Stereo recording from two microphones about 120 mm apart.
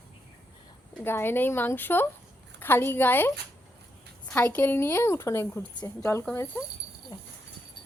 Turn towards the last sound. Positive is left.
turn(degrees=30)  # may be behind; listen again after turning